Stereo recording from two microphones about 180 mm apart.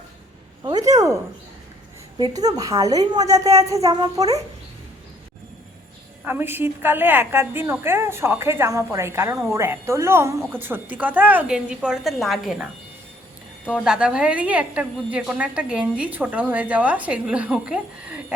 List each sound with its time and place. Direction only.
0.6 s a woman's voice: 20° right (ahead or behind)
2.1 s a woman's voice: 25° right (ahead or behind)
6.2 s a woman's voice: 10° right (ahead or behind)
13.7 s a woman's voice: 5° right (ahead or behind)